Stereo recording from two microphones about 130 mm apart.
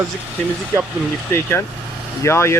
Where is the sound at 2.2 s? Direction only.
20° left (ahead or behind).